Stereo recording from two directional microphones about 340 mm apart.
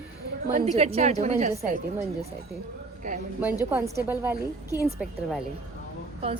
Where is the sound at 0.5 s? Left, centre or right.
Centre.